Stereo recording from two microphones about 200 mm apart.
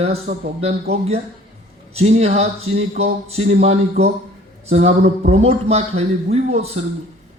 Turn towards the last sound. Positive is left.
turn(degrees=-30)  # may be behind; listen again after turning